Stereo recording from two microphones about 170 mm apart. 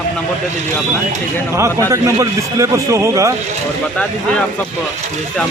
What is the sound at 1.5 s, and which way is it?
A man's voice, 15° right (ahead or behind).